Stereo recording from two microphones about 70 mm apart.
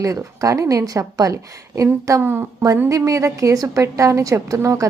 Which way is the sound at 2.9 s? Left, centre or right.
Right.